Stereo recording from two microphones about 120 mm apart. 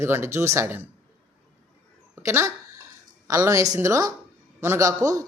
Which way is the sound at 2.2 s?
25° right (ahead or behind).